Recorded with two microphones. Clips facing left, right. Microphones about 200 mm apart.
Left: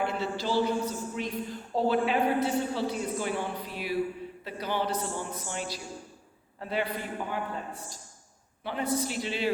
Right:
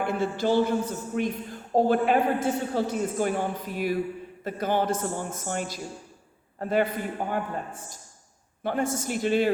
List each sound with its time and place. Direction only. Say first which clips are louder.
0.0 s a man's voice: right 5 dB; 50° right (ahead or behind)